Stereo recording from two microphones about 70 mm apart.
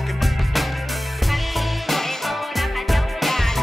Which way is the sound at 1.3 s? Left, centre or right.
Centre.